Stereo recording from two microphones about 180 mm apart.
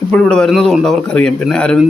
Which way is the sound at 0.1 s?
5° left (ahead or behind).